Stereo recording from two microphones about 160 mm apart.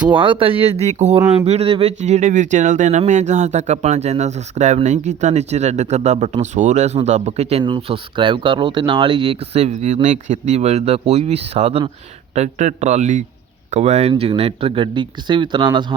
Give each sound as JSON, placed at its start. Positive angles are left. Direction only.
{"t": 0.2, "sound": "speech", "side_deg": -35}